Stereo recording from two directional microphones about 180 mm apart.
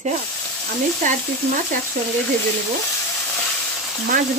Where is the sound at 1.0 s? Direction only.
45° right (ahead or behind).